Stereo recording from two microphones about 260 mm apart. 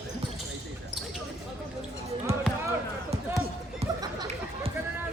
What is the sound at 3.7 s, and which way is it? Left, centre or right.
Chatter, centre.